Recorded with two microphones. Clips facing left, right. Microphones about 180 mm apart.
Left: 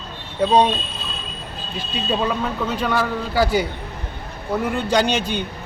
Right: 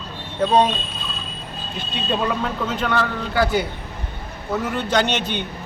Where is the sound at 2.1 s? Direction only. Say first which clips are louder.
Even; centre (ahead or behind).